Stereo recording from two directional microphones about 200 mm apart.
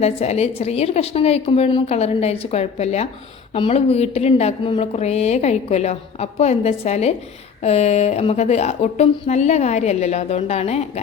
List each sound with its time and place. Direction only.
0.0 s speech: 30° left (ahead or behind)